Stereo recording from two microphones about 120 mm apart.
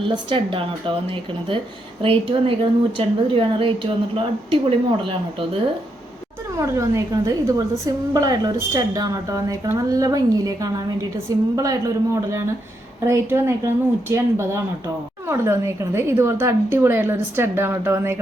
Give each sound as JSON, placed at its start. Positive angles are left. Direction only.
{"t": 0.0, "sound": "a woman's voice", "side_deg": -45}
{"t": 6.6, "sound": "a woman's voice", "side_deg": -25}